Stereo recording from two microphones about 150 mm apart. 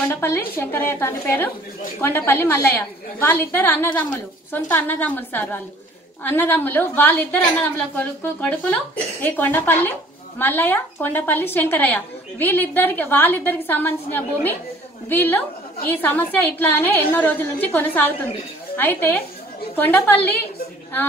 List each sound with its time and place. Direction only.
0.1 s a woman's voice: 15° left (ahead or behind)